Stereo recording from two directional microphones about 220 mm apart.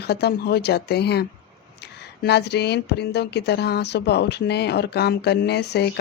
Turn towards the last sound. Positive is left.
turn(degrees=50)  # may be behind; listen again after turning